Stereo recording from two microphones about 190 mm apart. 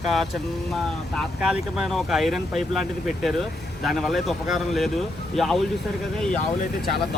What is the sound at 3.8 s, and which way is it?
Speech, centre (ahead or behind).